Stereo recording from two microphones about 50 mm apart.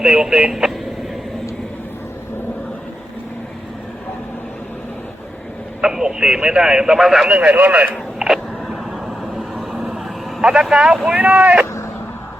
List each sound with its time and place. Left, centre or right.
0.0 s speech: centre
5.8 s speech: centre
7.3 s a man's voice: right
8.2 s a sound: centre
9.2 s vehicle: centre
10.4 s speech: centre
11.2 s speech: right